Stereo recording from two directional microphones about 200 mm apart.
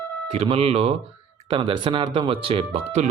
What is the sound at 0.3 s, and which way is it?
Speech, 30° right (ahead or behind).